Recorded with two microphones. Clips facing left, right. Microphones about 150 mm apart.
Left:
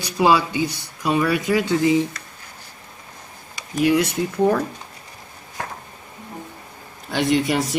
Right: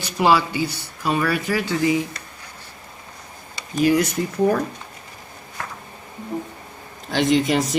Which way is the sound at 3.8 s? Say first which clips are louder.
Even; 65° left (ahead or behind).